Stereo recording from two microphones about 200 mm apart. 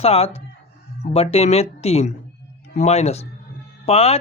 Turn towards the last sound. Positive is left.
turn(degrees=30)  # may be behind; listen again after turning